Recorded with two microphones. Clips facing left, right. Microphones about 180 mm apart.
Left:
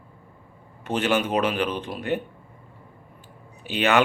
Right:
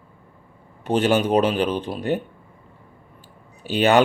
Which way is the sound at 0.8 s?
35° right (ahead or behind).